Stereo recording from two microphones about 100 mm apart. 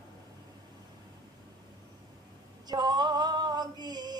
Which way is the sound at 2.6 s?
45° right (ahead or behind).